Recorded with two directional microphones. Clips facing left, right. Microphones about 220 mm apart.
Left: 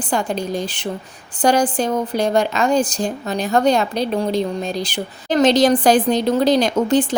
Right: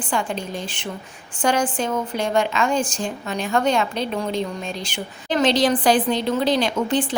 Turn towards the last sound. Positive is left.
turn(degrees=40)  # may be behind; listen again after turning